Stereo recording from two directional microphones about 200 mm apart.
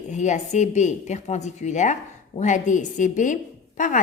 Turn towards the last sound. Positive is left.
turn(degrees=40)  # may be behind; listen again after turning